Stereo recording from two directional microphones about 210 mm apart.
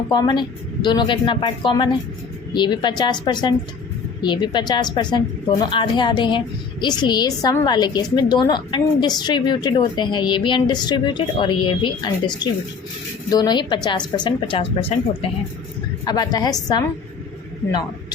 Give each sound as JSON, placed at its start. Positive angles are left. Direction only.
{"t": 0.1, "sound": "a woman's voice", "side_deg": 20}
{"t": 16.0, "sound": "a woman's voice", "side_deg": 20}